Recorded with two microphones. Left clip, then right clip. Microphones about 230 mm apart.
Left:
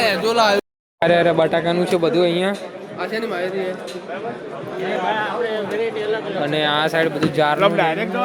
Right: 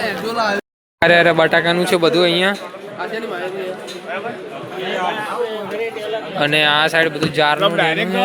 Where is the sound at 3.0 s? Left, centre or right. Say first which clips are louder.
Left 1 dB; left.